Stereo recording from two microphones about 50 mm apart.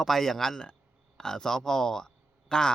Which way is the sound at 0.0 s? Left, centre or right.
Centre.